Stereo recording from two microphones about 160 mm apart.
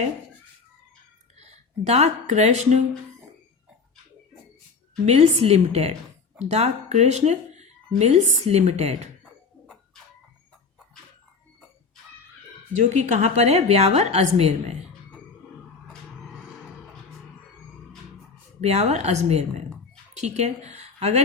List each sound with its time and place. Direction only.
1.4 s speech: 45° right (ahead or behind)
5.0 s a woman's voice: 45° right (ahead or behind)
12.7 s speech: 50° right (ahead or behind)
18.6 s speech: 45° right (ahead or behind)